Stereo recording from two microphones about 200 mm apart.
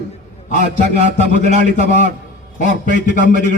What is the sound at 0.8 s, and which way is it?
Speech, 35° right (ahead or behind).